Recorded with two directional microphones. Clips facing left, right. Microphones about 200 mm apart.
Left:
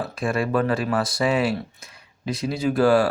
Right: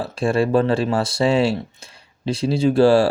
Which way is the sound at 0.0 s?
30° right (ahead or behind).